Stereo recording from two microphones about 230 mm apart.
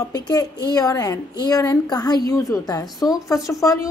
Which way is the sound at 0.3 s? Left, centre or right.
Centre.